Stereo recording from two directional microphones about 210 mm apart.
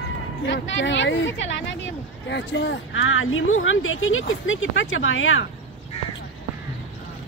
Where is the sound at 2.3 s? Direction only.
55° left (ahead or behind).